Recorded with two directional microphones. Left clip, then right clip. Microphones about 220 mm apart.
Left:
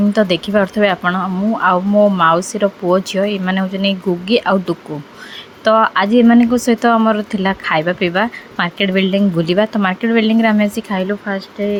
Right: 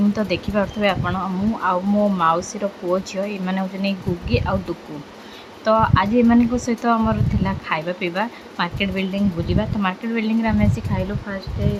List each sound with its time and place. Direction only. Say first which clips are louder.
0.1 s speech: left 8 dB; 20° left (ahead or behind)
5.6 s speech: left 5 dB; 25° left (ahead or behind)